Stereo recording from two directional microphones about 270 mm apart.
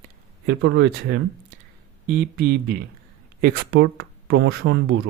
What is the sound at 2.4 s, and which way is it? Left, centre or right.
Speech, right.